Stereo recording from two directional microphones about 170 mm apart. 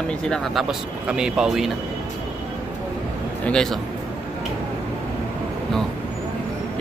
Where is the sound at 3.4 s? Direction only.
5° left (ahead or behind).